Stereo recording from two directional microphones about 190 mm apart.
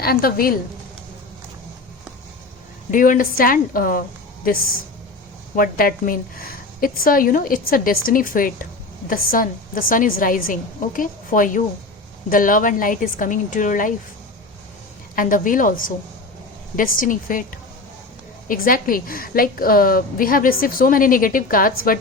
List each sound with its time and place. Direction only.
0.0 s a woman's voice: 50° left (ahead or behind)
2.9 s a woman's voice: 45° left (ahead or behind)
15.1 s a woman's voice: 45° left (ahead or behind)
18.4 s a woman's voice: 50° left (ahead or behind)